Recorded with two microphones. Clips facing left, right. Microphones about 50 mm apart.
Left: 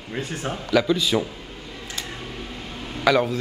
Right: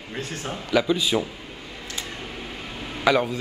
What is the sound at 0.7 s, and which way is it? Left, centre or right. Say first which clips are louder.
Speech: left 1 dB; centre.